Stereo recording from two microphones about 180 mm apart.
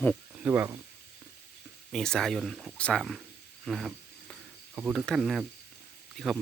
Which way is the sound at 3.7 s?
Centre (ahead or behind).